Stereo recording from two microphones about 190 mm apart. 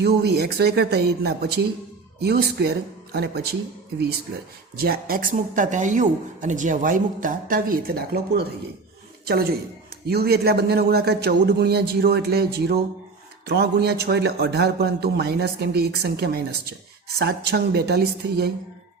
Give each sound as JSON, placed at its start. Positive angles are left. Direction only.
{"t": 0.0, "sound": "a man's voice", "side_deg": -60}
{"t": 4.8, "sound": "a man's voice", "side_deg": -50}